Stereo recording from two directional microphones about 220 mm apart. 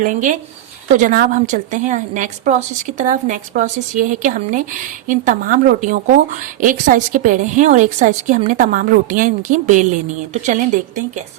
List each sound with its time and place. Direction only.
0.0 s a woman's voice: 35° right (ahead or behind)